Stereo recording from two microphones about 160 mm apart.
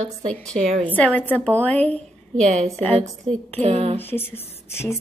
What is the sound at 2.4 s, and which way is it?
Speech, 45° right (ahead or behind).